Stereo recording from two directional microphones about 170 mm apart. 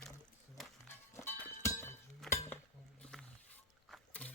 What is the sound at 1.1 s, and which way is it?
Music, 10° left (ahead or behind).